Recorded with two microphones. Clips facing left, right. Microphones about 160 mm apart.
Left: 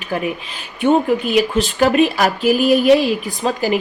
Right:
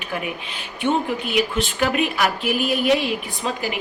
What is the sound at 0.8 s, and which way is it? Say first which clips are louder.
A woman's voice: left 7 dB; 40° left (ahead or behind).